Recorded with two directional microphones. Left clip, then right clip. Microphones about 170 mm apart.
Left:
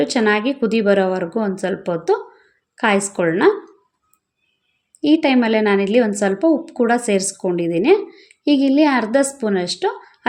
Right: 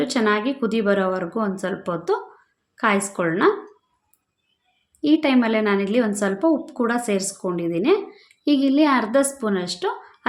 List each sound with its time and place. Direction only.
0.0 s a woman's voice: 20° left (ahead or behind)
4.9 s a woman's voice: 20° left (ahead or behind)